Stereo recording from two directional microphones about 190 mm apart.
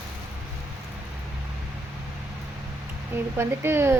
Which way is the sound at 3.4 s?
10° right (ahead or behind).